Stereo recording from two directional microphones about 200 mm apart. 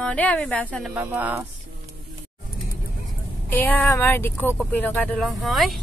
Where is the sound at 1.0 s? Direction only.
10° right (ahead or behind).